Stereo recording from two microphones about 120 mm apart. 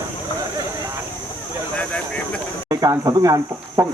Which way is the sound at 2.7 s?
30° right (ahead or behind).